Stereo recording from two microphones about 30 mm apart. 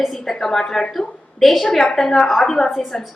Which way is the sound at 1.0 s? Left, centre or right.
Centre.